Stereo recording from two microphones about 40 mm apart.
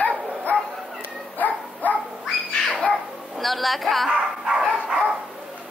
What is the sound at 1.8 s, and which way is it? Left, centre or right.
Dog, left.